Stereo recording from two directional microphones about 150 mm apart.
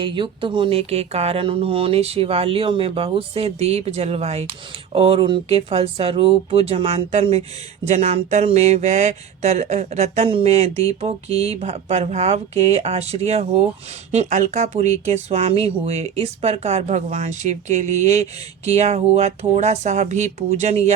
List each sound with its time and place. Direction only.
0.0 s speech: 35° right (ahead or behind)